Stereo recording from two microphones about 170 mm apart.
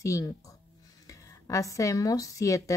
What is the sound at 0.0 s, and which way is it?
Speech, 20° left (ahead or behind).